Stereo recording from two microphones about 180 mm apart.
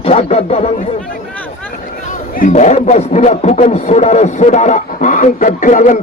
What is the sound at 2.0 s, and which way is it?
A man's voice, 45° left (ahead or behind).